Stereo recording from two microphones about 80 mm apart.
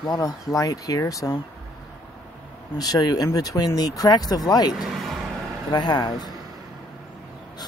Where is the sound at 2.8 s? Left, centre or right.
Left.